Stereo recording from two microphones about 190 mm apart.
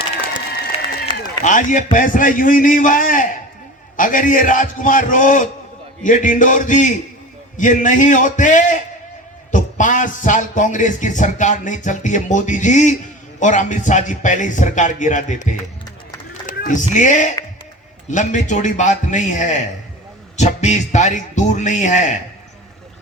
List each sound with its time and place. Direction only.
0.7 s run: 30° left (ahead or behind)
1.5 s a man's voice: 45° left (ahead or behind)